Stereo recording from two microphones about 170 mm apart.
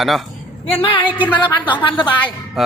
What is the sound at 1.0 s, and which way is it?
Speech, 10° right (ahead or behind).